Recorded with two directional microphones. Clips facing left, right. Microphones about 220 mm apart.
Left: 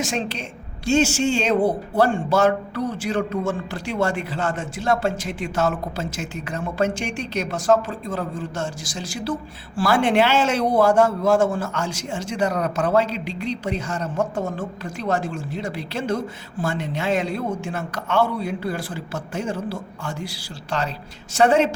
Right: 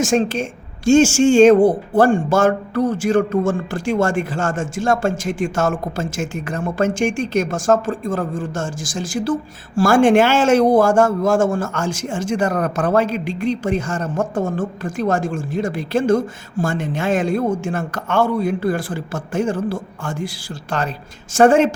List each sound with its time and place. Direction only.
0.0 s speech: 50° right (ahead or behind)